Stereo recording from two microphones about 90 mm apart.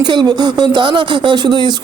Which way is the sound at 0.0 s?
55° right (ahead or behind).